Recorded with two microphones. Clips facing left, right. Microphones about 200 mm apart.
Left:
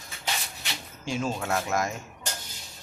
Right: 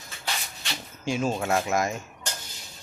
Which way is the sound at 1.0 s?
10° right (ahead or behind).